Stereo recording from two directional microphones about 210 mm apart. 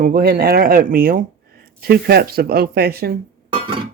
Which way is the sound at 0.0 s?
45° right (ahead or behind).